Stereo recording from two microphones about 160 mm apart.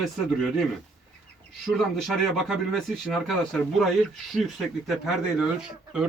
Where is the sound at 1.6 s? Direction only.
Centre (ahead or behind).